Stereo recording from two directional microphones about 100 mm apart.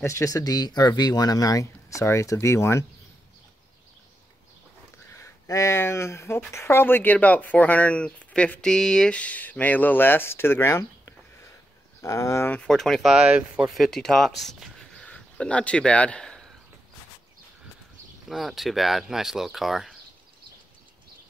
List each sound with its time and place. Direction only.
0.0 s speech: 35° left (ahead or behind)
5.1 s speech: 30° left (ahead or behind)
12.6 s speech: 5° left (ahead or behind)
13.7 s speech: 5° left (ahead or behind)
18.3 s speech: centre (ahead or behind)